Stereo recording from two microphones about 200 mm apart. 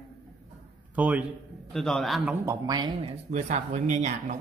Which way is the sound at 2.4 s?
20° right (ahead or behind).